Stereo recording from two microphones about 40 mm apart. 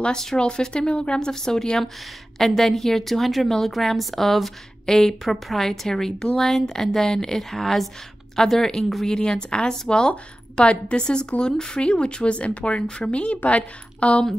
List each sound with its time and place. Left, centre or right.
0.0 s a woman's voice: centre; by 14.2 s left